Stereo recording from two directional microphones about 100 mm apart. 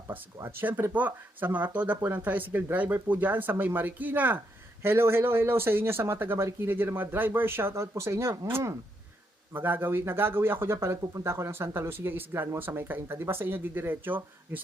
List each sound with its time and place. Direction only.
0.4 s speech: 20° right (ahead or behind)